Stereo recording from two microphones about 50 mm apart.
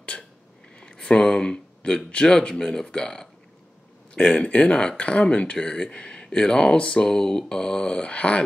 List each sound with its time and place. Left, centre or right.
0.7 s speech: centre